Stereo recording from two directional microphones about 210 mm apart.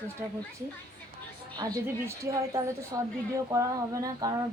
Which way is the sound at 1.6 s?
15° right (ahead or behind).